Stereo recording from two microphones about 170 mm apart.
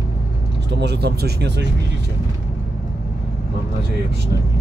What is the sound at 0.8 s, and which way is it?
Speech, 75° right (ahead or behind).